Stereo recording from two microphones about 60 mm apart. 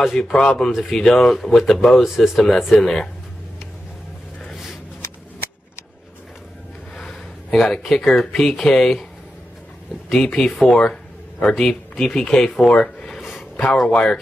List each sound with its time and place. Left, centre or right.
0.0 s speech: centre
4.5 s a sound: centre
7.0 s speech: centre
10.1 s speech: centre